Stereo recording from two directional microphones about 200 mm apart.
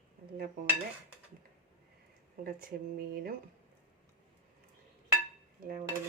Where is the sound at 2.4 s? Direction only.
45° right (ahead or behind).